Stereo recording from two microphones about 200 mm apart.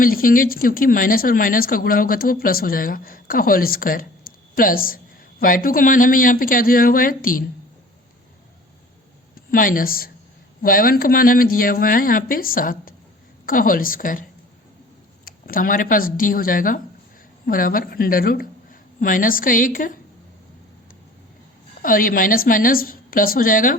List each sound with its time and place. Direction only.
0.0 s speech: 45° left (ahead or behind)
9.3 s speech: 45° left (ahead or behind)
21.8 s speech: 45° left (ahead or behind)